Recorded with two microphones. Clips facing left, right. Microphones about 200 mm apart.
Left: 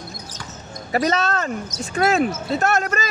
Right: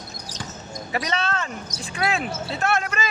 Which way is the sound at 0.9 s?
40° left (ahead or behind).